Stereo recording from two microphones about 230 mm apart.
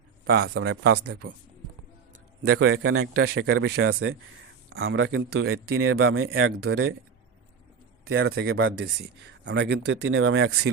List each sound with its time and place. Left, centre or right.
0.3 s speech: right
2.5 s speech: right
3.2 s speech: right
8.1 s speech: right